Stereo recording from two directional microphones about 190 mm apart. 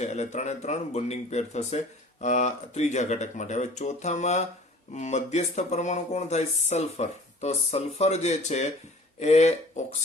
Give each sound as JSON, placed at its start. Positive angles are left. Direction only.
{"t": 0.0, "sound": "speech", "side_deg": 35}